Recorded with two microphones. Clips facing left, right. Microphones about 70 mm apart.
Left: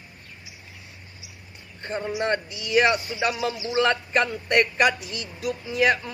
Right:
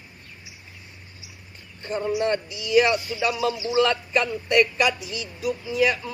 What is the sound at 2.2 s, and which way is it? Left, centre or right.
Speech, left.